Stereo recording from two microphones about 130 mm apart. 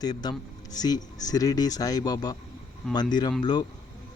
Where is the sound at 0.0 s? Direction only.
30° left (ahead or behind).